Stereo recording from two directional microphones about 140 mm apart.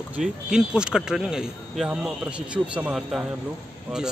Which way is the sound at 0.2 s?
5° right (ahead or behind).